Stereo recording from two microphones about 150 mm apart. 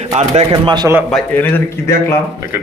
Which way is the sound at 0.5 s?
30° right (ahead or behind).